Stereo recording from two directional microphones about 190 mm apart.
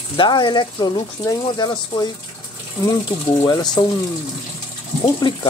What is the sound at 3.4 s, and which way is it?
Speech, 20° left (ahead or behind).